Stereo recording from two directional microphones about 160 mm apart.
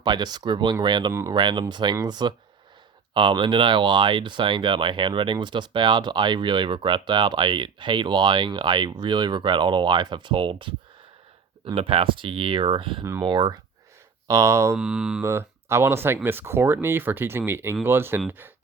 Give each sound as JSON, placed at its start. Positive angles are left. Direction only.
{"t": 0.0, "sound": "speech", "side_deg": -25}
{"t": 14.3, "sound": "speech", "side_deg": -20}
{"t": 14.8, "sound": "mantra", "side_deg": -5}
{"t": 15.2, "sound": "speech", "side_deg": -15}